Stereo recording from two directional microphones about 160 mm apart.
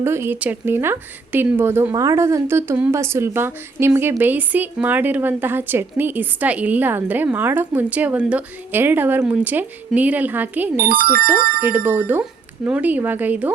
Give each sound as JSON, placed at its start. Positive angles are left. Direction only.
{"t": 0.0, "sound": "speech", "side_deg": -15}
{"t": 10.8, "sound": "speech", "side_deg": -65}
{"t": 11.7, "sound": "speech", "side_deg": -10}